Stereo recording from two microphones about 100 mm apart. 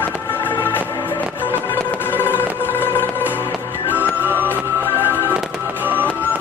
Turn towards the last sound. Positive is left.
turn(degrees=20)  # may be behind; listen again after turning